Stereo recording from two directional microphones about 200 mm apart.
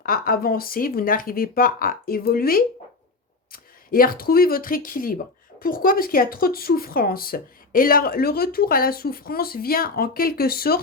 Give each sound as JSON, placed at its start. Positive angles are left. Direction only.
{"t": 0.0, "sound": "speech", "side_deg": 45}